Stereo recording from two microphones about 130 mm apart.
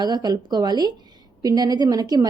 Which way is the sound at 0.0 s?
30° right (ahead or behind).